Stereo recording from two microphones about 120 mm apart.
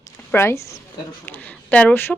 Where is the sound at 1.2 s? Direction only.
15° left (ahead or behind).